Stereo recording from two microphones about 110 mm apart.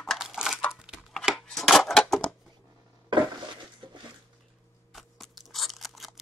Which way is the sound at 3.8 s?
40° right (ahead or behind).